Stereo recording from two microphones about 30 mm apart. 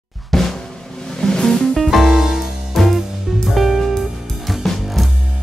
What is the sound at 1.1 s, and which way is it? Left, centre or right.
Music, centre.